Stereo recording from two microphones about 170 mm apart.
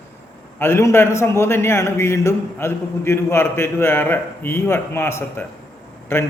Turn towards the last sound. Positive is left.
turn(degrees=15)  # may be behind; listen again after turning